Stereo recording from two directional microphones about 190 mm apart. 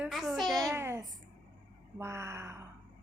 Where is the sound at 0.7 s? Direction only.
15° right (ahead or behind).